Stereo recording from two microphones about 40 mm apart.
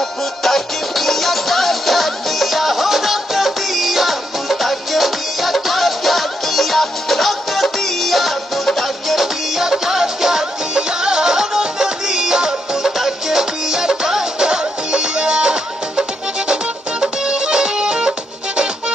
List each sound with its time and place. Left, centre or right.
0.4 s music: centre; by 18.1 s right